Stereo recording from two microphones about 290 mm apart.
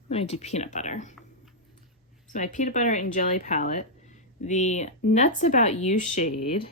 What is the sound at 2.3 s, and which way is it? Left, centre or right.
Speech, left.